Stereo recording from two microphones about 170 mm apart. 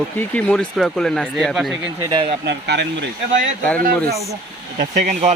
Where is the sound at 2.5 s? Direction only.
80° right.